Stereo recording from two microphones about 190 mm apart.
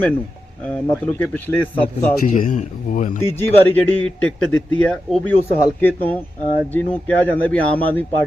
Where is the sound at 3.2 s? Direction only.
10° left (ahead or behind).